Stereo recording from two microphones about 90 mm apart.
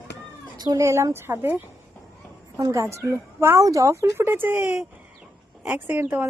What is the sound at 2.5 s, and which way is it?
A woman's voice, 35° right (ahead or behind).